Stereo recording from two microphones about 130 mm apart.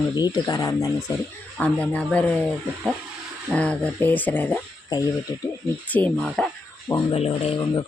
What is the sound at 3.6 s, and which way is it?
Speech, 10° left (ahead or behind).